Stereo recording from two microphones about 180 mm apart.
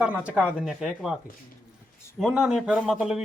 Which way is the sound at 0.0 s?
5° right (ahead or behind).